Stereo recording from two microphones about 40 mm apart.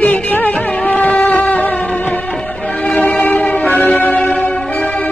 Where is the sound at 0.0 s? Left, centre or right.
Left.